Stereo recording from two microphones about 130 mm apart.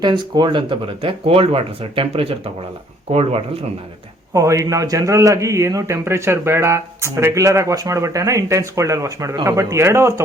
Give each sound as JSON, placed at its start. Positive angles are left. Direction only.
{"t": 0.0, "sound": "speech", "side_deg": -35}
{"t": 4.4, "sound": "a man's voice", "side_deg": -25}